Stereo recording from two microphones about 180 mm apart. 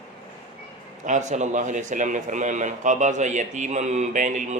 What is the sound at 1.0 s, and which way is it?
A man's voice, 40° right (ahead or behind).